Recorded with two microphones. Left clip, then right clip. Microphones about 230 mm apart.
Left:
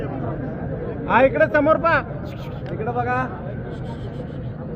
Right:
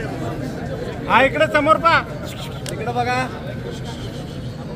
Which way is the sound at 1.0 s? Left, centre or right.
Left.